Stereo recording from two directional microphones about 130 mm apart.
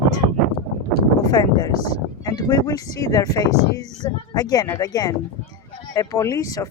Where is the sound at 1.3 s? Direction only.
30° left (ahead or behind).